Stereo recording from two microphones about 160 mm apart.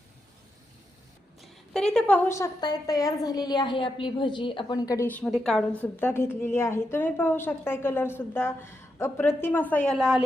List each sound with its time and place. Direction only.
1.4 s a woman's voice: centre (ahead or behind); by 5.0 s 25° left (ahead or behind)
5.0 s a woman's voice: 5° left (ahead or behind)
5.8 s a woman's voice: 15° left (ahead or behind); by 10.2 s centre (ahead or behind)